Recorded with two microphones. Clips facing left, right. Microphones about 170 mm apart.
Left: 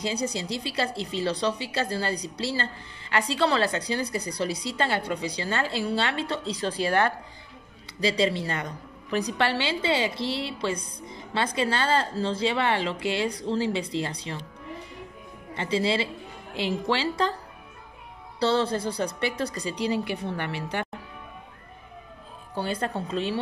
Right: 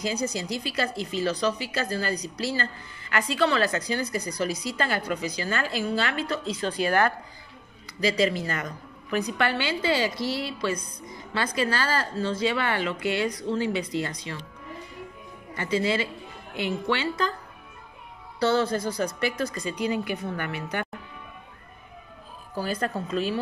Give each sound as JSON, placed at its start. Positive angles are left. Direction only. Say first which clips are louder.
{"t": 0.0, "sound": "speech", "louder": "even", "side_deg": 30}
{"t": 15.5, "sound": "a woman's voice", "louder": "even", "side_deg": 25}
{"t": 18.4, "sound": "speech", "louder": "right 1 dB", "side_deg": 30}
{"t": 22.5, "sound": "speech", "louder": "even", "side_deg": 25}